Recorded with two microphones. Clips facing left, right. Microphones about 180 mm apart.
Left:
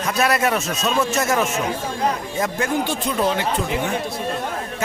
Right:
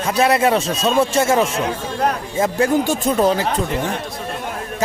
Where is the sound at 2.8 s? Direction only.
45° right (ahead or behind).